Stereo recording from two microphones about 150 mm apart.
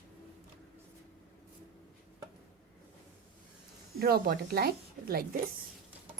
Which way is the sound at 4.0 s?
90° right.